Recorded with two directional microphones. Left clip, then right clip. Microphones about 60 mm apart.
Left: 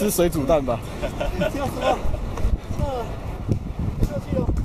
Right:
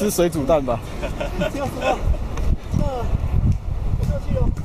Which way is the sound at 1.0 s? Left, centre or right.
Right.